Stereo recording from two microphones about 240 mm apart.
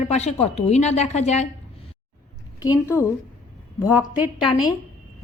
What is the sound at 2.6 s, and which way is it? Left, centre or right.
Speech, centre.